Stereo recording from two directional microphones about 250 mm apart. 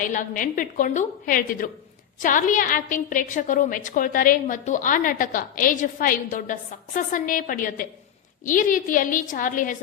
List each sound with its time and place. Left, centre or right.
0.0 s a woman's voice: left